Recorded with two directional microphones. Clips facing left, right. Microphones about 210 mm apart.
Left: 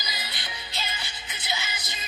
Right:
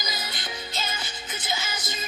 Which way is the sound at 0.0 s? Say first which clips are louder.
Right 4 dB; 45° right (ahead or behind).